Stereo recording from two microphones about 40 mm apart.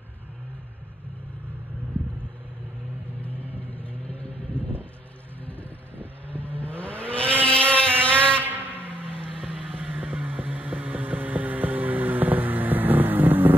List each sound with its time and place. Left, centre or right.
3.3 s vehicle: right
3.7 s vehicle: left
7.4 s motorboat: left
8.4 s a sound: right
9.0 s vehicle: left
9.5 s vehicle: right